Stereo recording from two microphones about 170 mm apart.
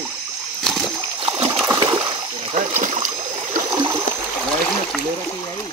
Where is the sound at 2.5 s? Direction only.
45° right (ahead or behind).